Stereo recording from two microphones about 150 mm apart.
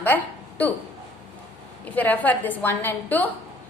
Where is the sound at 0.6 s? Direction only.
10° left (ahead or behind).